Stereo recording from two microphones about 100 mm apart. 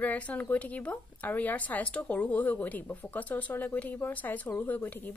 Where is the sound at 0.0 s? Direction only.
15° left (ahead or behind).